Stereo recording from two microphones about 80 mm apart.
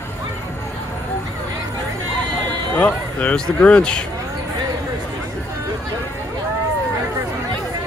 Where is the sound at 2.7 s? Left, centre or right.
Left.